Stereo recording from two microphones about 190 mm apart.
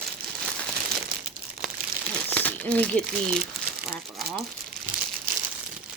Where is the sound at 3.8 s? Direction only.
5° right (ahead or behind).